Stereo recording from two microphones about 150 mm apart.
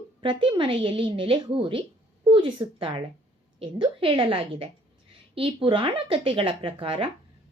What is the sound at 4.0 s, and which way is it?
Speech, 35° right (ahead or behind).